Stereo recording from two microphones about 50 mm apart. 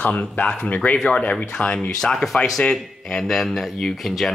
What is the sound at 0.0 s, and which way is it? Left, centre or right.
Speech, left.